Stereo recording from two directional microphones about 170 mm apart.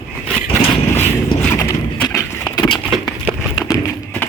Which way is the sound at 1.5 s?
15° left (ahead or behind).